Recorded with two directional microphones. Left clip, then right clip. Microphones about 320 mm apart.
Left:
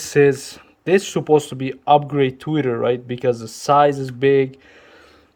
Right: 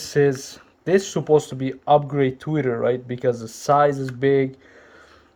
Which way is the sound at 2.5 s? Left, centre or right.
Left.